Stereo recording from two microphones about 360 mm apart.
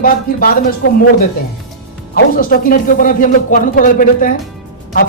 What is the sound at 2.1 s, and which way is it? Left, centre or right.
A man's voice, left.